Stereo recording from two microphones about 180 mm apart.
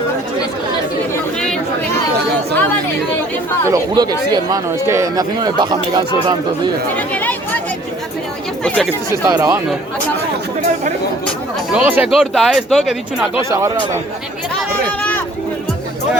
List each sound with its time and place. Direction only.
3.7 s speech: 20° right (ahead or behind)
6.9 s chatter: 10° left (ahead or behind)
8.6 s speech: 5° left (ahead or behind)
9.2 s speech: 20° right (ahead or behind)
11.7 s speech: 5° right (ahead or behind)
13.5 s speech: 15° right (ahead or behind)
14.8 s run: 5° left (ahead or behind)